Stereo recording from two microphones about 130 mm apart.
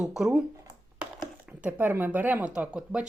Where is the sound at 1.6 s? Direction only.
15° right (ahead or behind).